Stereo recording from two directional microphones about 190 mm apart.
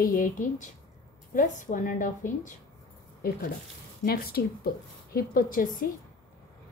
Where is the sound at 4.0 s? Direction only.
50° left (ahead or behind).